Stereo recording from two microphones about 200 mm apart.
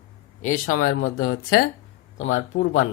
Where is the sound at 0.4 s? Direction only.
40° left (ahead or behind).